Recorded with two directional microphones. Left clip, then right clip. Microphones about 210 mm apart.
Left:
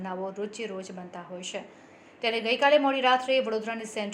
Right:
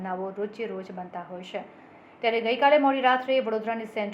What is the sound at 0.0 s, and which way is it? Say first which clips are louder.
A woman's voice: right 2 dB; 30° left (ahead or behind).